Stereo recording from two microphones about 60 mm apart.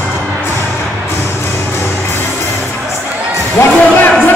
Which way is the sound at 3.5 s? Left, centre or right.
Left.